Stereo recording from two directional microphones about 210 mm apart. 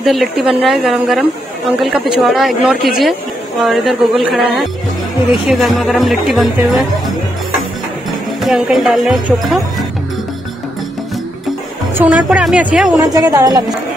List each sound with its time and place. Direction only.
0.0 s speech: centre (ahead or behind)
8.4 s speech: centre (ahead or behind)
11.9 s speech: 5° right (ahead or behind)
13.1 s a woman's voice: 15° right (ahead or behind)